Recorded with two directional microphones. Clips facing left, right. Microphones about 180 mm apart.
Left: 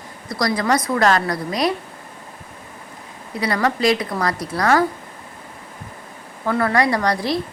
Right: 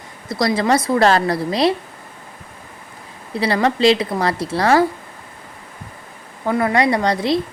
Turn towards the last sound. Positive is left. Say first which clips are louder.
# right 3 dB
turn(degrees=-25)  # may be behind; listen again after turning